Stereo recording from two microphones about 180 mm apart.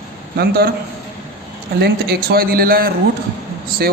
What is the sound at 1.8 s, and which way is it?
A man's voice, 60° right (ahead or behind).